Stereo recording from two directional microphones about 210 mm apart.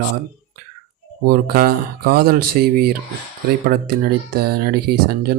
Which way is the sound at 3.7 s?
50° right (ahead or behind).